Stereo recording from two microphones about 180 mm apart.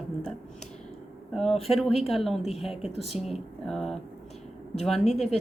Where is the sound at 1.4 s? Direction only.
35° left (ahead or behind).